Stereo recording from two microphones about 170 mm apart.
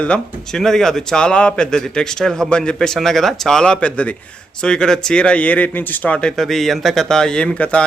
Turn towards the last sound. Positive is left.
turn(degrees=5)  # may be behind; listen again after turning